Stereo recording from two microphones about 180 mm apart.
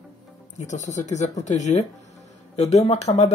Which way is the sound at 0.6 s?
40° left (ahead or behind).